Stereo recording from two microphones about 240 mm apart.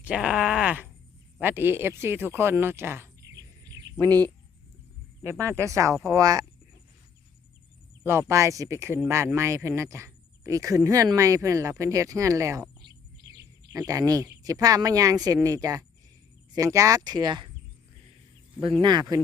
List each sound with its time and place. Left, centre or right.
0.0 s speech: centre
5.2 s speech: centre
8.0 s speech: centre
13.7 s speech: centre
18.6 s speech: right